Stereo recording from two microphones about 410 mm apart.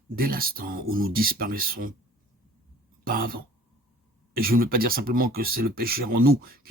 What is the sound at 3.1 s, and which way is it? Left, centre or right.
Speech, right.